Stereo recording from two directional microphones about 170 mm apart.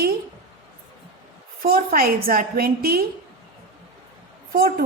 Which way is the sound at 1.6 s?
60° right (ahead or behind).